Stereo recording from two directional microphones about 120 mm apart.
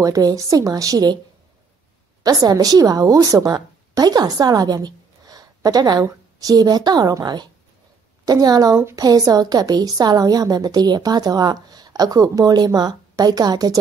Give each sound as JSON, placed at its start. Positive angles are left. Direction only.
{"t": 0.0, "sound": "a woman's voice", "side_deg": -30}
{"t": 2.2, "sound": "a woman's voice", "side_deg": -30}